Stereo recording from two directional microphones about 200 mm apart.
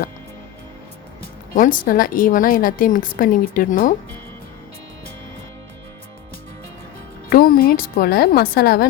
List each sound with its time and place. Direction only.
1.2 s speech: 40° left (ahead or behind)
7.3 s a woman's voice: 45° left (ahead or behind)